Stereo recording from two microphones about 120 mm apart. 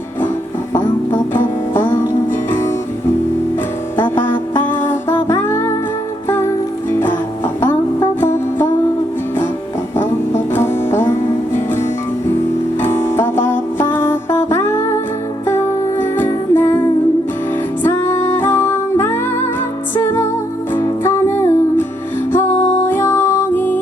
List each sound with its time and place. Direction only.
0.7 s music: 20° left (ahead or behind)
3.9 s music: 15° left (ahead or behind)
6.9 s music: 20° left (ahead or behind)
8.2 s music: 20° left (ahead or behind)
10.0 s music: 20° left (ahead or behind)